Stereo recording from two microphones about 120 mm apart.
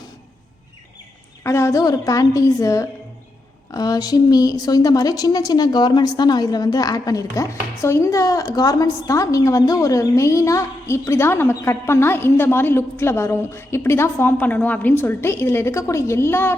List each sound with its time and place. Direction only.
1.5 s a woman's voice: 25° left (ahead or behind)